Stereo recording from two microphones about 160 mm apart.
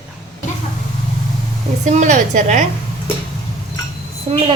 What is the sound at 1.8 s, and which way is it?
Speech, 50° right (ahead or behind).